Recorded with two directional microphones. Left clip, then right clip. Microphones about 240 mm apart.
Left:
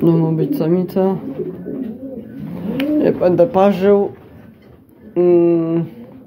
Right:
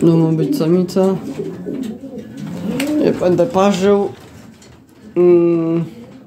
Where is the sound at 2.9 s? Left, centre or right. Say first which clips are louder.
Left 1 dB; centre.